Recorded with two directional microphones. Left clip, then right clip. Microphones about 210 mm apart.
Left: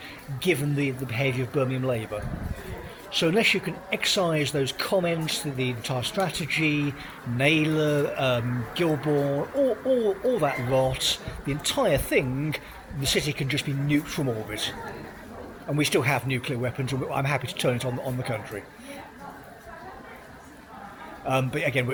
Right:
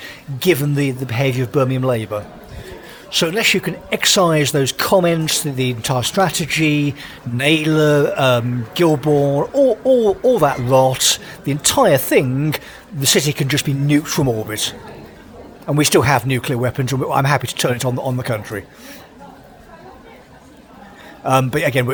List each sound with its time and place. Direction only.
0.0 s speech: 50° right (ahead or behind)
21.2 s speech: 45° right (ahead or behind)